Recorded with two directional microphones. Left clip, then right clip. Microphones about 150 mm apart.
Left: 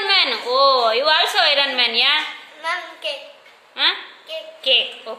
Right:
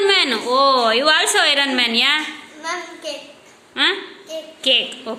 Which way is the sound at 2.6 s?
30° left (ahead or behind).